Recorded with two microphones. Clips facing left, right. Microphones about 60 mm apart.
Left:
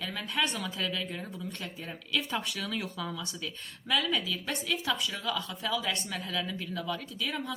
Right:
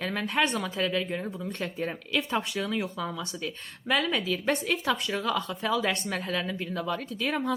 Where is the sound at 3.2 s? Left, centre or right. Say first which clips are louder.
Right 4 dB; right.